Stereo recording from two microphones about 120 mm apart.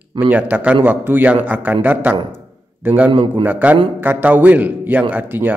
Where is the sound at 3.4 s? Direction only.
15° right (ahead or behind).